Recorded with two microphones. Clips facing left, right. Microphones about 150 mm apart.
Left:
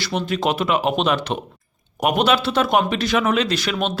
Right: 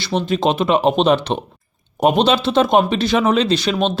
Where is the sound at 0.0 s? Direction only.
25° right (ahead or behind).